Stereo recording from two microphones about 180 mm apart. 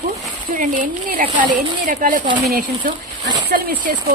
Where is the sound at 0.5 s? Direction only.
45° right (ahead or behind).